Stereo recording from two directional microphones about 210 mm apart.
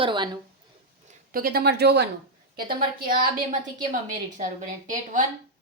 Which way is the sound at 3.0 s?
45° right (ahead or behind).